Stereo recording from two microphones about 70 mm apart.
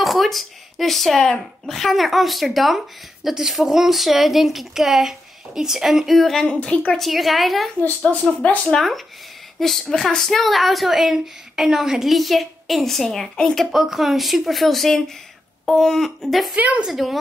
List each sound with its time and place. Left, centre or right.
0.0 s speech: centre
6.4 s speech: centre
7.0 s speech: centre
8.0 s speech: centre
8.6 s speech: centre
13.7 s speech: centre
16.5 s a woman's voice: right
16.8 s speech: centre